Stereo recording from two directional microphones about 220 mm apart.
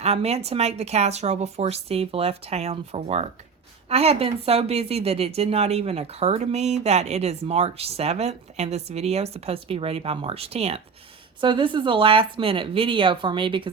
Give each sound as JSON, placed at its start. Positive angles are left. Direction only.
{"t": 0.0, "sound": "speech", "side_deg": -30}